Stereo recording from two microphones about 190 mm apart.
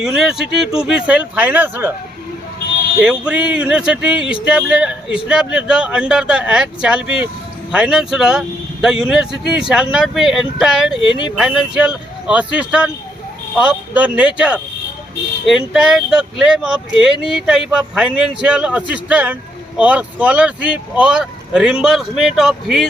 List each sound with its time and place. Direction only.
0.0 s speech: 5° right (ahead or behind)
3.0 s speech: 5° right (ahead or behind)
10.9 s speech: 25° left (ahead or behind)
11.3 s speech: 5° right (ahead or behind)